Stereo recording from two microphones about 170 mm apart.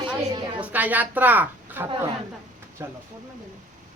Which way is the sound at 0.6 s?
10° right (ahead or behind).